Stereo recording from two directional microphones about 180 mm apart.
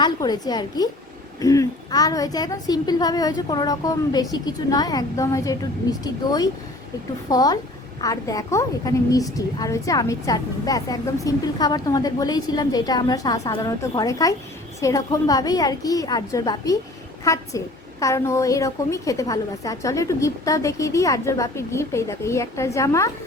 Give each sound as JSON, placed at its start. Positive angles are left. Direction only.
{"t": 0.0, "sound": "a woman's voice", "side_deg": 20}